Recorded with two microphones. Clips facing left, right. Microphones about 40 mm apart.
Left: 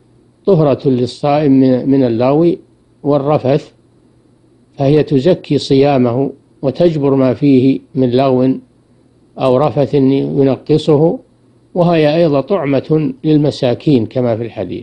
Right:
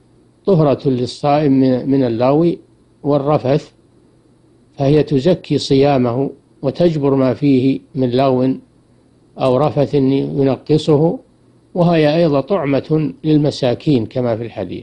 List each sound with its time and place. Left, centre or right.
0.5 s speech: left
4.7 s speech: left
12.5 s speech: left